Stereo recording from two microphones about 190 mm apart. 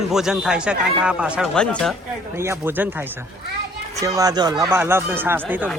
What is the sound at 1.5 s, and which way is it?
Speech, 5° left (ahead or behind).